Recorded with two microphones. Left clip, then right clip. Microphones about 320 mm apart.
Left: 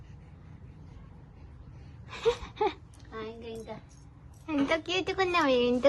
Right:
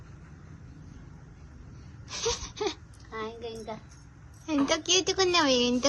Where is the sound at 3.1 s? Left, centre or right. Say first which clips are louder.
Right 3 dB; right.